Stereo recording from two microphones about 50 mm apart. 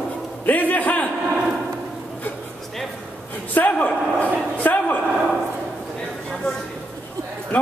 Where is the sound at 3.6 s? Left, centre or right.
Left.